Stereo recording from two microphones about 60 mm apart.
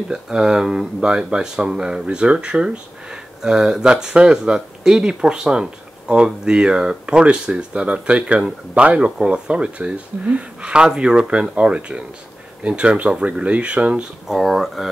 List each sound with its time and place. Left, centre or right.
0.1 s speech: centre
14.2 s speech: centre